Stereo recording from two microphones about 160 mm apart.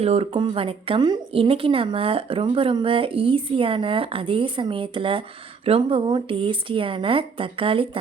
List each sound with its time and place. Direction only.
0.0 s a woman's voice: 40° right (ahead or behind)